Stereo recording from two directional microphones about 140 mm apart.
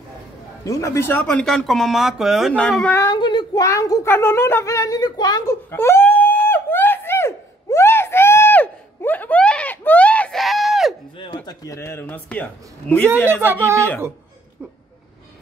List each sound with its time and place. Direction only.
0.7 s speech: 20° left (ahead or behind)
1.2 s speech: 5° left (ahead or behind)
3.0 s speech: 30° left (ahead or behind)
5.7 s a sound: 15° left (ahead or behind); by 11.0 s centre (ahead or behind)
11.1 s a sound: 35° left (ahead or behind)
11.6 s a man's voice: 20° left (ahead or behind)